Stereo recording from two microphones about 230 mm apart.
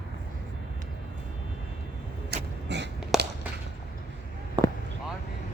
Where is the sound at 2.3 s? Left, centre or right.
Right.